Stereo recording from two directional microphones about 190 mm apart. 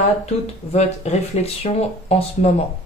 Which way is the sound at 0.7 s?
35° left (ahead or behind).